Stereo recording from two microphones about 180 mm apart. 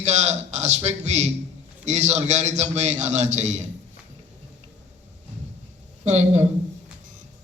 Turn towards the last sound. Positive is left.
turn(degrees=-40)  # may be behind; listen again after turning